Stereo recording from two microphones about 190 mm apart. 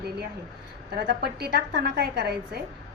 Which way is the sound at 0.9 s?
55° right (ahead or behind).